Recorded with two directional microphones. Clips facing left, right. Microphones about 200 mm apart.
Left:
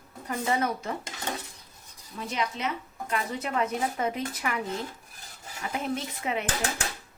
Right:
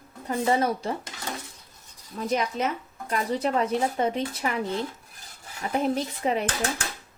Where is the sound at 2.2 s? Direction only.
45° right (ahead or behind).